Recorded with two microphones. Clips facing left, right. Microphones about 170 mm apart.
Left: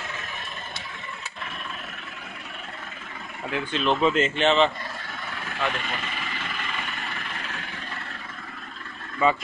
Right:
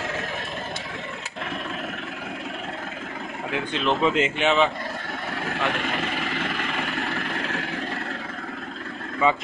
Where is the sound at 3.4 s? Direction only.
15° right (ahead or behind).